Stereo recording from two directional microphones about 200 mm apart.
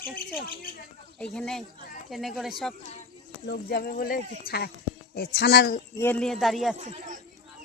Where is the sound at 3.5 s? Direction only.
50° left (ahead or behind).